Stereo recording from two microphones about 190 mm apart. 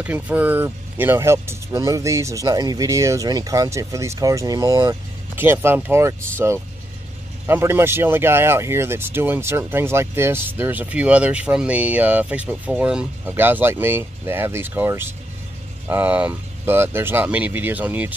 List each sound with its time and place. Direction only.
0.0 s speech: 5° right (ahead or behind)
7.4 s speech: 10° right (ahead or behind)